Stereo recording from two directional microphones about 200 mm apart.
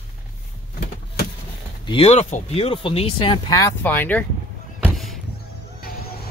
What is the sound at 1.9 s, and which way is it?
Speech, 30° left (ahead or behind).